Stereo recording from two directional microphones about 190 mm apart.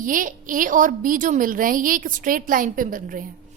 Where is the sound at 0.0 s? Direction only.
45° right (ahead or behind).